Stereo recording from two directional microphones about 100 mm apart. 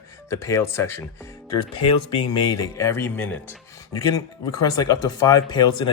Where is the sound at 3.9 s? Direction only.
40° left (ahead or behind).